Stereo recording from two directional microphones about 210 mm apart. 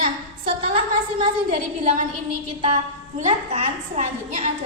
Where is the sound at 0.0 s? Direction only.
30° right (ahead or behind).